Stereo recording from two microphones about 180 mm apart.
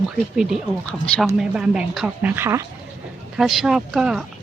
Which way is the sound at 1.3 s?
5° right (ahead or behind).